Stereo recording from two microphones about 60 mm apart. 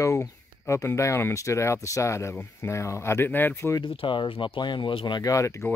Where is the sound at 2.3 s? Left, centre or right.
Left.